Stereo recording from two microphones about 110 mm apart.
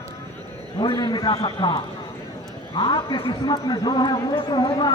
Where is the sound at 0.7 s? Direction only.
50° left (ahead or behind).